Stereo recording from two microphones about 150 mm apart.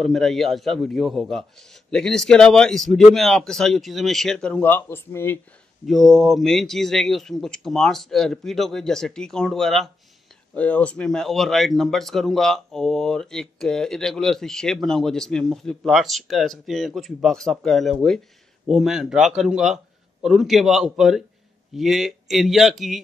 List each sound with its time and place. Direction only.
0.0 s speech: centre (ahead or behind)
5.9 s speech: centre (ahead or behind)